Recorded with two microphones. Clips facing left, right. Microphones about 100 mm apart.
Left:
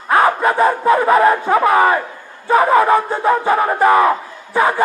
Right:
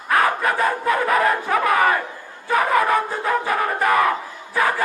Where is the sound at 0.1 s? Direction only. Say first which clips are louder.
Left 5 dB; 25° left (ahead or behind).